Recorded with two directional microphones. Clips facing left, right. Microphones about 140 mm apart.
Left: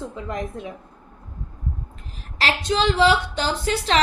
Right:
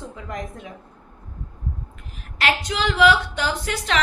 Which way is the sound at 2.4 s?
30° left (ahead or behind).